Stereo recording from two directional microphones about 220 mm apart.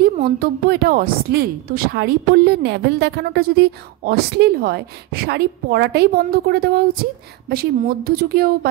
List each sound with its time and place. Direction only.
0.0 s a woman's voice: 45° right (ahead or behind)